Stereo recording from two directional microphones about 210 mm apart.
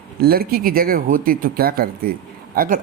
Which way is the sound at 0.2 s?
45° right (ahead or behind).